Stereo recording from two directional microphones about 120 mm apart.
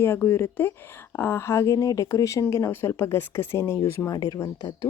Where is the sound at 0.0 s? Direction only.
20° left (ahead or behind).